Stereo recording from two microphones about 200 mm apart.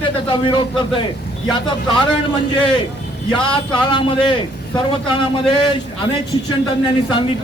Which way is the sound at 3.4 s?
25° left (ahead or behind).